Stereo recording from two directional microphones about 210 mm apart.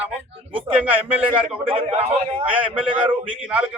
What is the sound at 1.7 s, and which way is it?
Speech, 25° right (ahead or behind).